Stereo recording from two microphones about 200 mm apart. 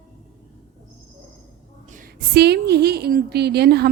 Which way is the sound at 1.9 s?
45° right (ahead or behind).